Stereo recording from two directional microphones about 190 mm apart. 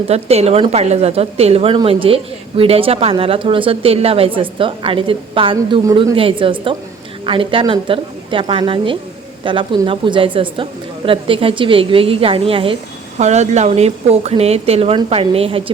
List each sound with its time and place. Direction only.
0.1 s a woman's voice: 35° right (ahead or behind)